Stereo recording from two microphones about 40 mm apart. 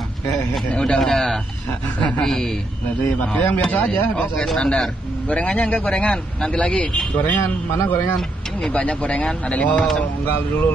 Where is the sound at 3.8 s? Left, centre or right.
Left.